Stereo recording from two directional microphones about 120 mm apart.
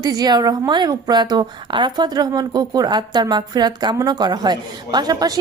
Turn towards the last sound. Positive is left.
turn(degrees=-30)  # may be behind; listen again after turning